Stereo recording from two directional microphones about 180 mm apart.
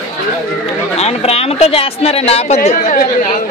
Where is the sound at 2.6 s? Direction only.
45° left (ahead or behind).